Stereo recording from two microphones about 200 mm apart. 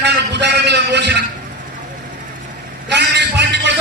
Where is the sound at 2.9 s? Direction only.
60° right (ahead or behind).